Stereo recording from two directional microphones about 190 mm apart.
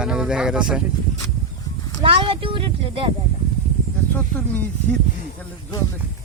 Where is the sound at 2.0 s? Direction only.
30° right (ahead or behind).